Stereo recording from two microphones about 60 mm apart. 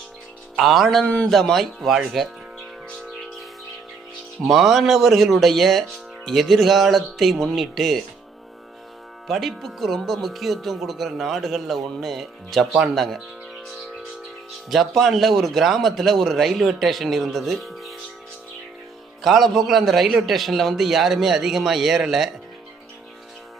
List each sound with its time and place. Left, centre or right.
0.6 s speech: centre
1.0 s speech: centre
1.3 s speech: centre
4.4 s speech: centre
9.2 s speech: centre
14.7 s speech: centre
19.2 s speech: centre